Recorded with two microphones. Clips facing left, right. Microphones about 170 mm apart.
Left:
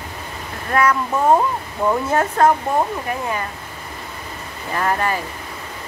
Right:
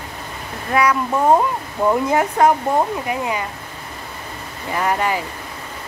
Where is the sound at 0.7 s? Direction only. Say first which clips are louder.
Even; 10° right (ahead or behind).